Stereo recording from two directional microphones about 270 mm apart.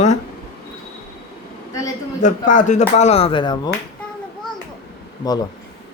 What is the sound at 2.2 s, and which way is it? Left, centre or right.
Speech, left.